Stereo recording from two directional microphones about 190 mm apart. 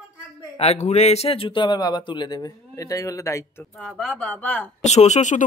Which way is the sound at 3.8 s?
5° left (ahead or behind).